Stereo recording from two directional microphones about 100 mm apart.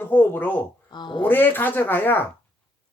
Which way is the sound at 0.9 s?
50° left (ahead or behind).